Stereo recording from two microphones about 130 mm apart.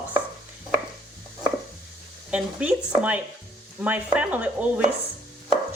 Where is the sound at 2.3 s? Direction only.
10° right (ahead or behind).